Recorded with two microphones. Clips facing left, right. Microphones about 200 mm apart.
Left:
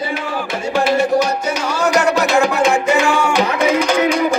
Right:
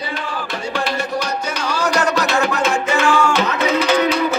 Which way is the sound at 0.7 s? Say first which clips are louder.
Left 8 dB; 5° left (ahead or behind).